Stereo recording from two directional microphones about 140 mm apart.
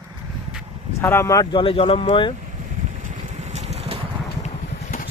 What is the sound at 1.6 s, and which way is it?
Speech, 40° left (ahead or behind).